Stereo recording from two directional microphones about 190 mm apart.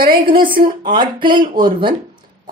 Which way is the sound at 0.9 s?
25° right (ahead or behind).